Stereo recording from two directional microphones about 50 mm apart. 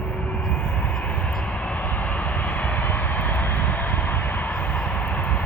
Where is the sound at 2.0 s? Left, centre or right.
Left.